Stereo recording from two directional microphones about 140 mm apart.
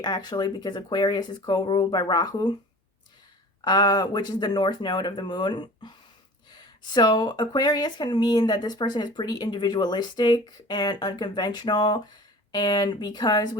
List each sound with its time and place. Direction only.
0.0 s speech: 30° left (ahead or behind)
3.6 s speech: 30° left (ahead or behind)